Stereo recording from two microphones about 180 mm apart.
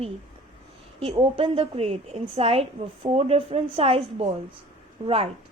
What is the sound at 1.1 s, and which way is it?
A woman's voice, 30° right (ahead or behind).